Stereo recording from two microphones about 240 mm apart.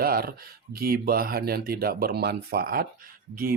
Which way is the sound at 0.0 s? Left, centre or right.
Right.